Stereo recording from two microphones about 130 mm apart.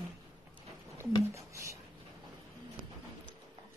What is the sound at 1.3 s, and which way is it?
Speech, 20° right (ahead or behind).